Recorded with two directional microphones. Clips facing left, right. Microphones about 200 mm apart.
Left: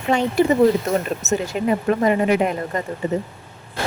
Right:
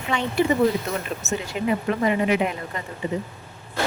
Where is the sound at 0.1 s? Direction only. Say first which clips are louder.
Left 5 dB; 40° left (ahead or behind).